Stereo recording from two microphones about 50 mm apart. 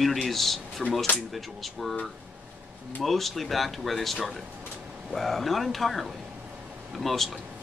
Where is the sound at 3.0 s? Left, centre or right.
Centre.